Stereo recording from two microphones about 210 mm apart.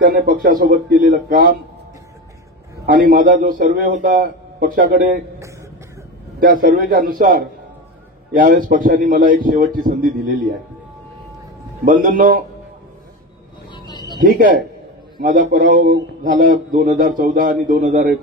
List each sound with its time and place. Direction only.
0.0 s speech: 45° right (ahead or behind)
2.9 s a man's voice: 40° right (ahead or behind)
6.4 s a man's voice: 40° right (ahead or behind)
11.8 s speech: 40° right (ahead or behind)
13.7 s a sound: 20° left (ahead or behind)
14.2 s a man's voice: 45° right (ahead or behind)